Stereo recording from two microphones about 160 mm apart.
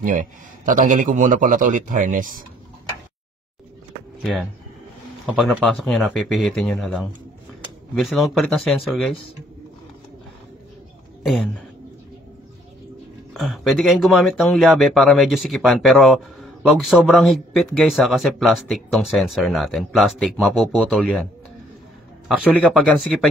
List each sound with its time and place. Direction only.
0.7 s a man's voice: 55° right (ahead or behind)
4.2 s speech: centre (ahead or behind)
13.3 s speech: centre (ahead or behind)
22.3 s speech: 10° right (ahead or behind)